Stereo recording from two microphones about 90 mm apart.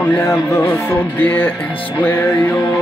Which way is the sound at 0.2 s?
35° left (ahead or behind).